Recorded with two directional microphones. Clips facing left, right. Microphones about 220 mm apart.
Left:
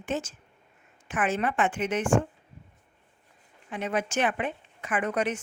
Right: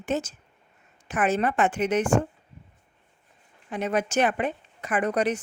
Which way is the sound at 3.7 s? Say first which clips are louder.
Right 3 dB; 40° right (ahead or behind).